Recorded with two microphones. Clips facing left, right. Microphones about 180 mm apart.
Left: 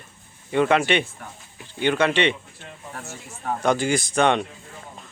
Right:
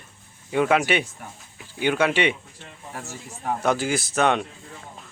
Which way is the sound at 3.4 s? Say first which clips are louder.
Left 1 dB; 5° right (ahead or behind).